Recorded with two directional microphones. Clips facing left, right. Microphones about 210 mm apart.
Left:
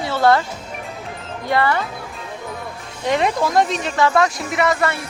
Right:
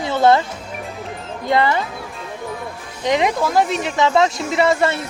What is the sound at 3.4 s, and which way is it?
Speech, 5° right (ahead or behind).